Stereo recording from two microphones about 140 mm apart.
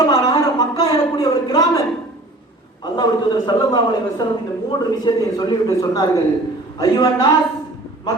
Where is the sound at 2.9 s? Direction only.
30° left (ahead or behind).